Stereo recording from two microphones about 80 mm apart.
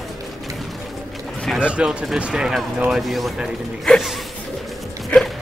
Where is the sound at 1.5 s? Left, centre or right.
Centre.